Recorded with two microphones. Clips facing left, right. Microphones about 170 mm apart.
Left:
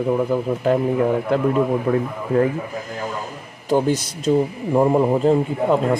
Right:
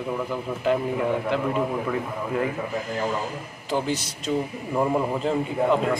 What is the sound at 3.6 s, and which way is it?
A man's voice, 45° left (ahead or behind).